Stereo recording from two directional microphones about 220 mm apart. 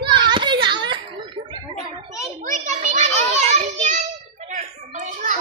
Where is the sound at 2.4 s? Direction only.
35° right (ahead or behind).